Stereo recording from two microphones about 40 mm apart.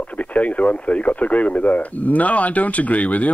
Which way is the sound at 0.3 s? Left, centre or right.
Left.